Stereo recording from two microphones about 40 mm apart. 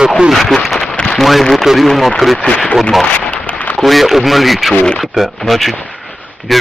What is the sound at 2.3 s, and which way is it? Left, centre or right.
Speech, left.